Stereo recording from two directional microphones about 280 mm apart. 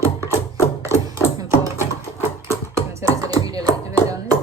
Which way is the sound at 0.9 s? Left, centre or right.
Centre.